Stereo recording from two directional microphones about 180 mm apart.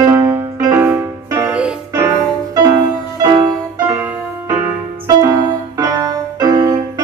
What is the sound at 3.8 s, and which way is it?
Music, 15° right (ahead or behind).